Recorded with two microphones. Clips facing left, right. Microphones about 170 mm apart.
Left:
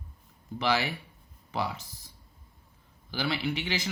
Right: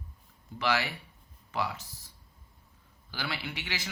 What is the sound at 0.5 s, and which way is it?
Speech, 15° left (ahead or behind).